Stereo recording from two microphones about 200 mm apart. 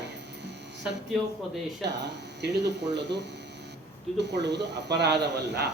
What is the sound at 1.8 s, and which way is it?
Speech, 60° right (ahead or behind).